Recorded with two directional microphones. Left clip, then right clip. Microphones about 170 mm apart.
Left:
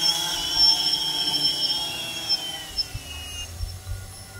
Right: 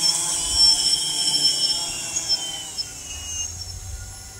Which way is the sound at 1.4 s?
20° left (ahead or behind).